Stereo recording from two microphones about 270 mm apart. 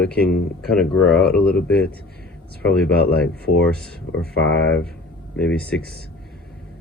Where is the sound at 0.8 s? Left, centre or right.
Centre.